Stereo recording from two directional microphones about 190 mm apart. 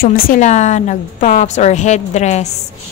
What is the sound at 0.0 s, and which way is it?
A woman's voice, 45° left (ahead or behind).